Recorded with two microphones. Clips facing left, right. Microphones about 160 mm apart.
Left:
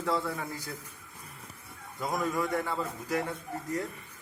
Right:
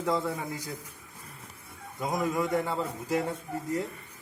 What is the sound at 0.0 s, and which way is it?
Speech, 20° right (ahead or behind).